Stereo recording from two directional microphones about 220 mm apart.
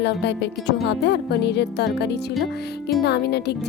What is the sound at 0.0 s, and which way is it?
A woman's voice, 50° left (ahead or behind).